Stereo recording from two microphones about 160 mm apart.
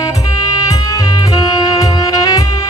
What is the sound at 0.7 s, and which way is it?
Music, 20° left (ahead or behind).